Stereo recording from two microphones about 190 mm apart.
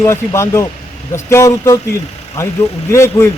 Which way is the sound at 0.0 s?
15° left (ahead or behind).